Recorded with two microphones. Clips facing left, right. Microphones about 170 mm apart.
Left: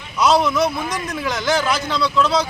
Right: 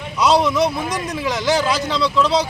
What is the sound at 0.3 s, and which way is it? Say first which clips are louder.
Speech: right 1 dB; 35° right (ahead or behind).